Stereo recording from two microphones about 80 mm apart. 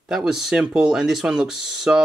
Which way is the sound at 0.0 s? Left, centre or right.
Centre.